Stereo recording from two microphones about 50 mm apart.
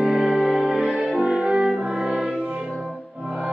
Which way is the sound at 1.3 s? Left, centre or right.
Centre.